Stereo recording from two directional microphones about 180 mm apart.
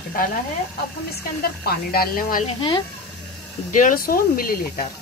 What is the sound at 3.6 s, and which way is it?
Speech, 45° left (ahead or behind).